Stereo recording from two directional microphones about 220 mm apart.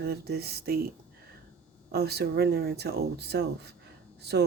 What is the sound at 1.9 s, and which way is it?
Speech, 45° right (ahead or behind).